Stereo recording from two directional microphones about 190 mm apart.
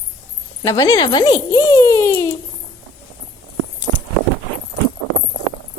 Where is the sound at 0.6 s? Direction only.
20° left (ahead or behind).